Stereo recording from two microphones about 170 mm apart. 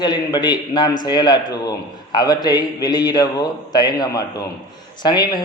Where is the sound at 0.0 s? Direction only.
25° left (ahead or behind).